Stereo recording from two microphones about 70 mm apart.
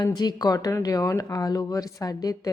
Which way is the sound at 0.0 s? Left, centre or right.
Left.